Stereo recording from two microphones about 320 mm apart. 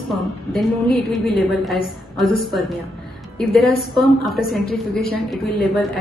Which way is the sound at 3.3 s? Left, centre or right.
Centre.